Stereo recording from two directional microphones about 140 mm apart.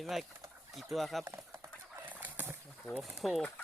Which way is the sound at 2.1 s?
10° right (ahead or behind).